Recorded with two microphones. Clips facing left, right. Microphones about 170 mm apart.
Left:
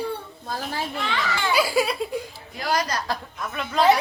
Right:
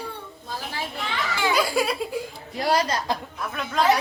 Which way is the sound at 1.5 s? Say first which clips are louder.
Left 2 dB; 5° left (ahead or behind).